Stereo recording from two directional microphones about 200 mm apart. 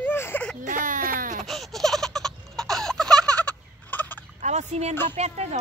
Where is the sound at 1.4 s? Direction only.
Centre (ahead or behind).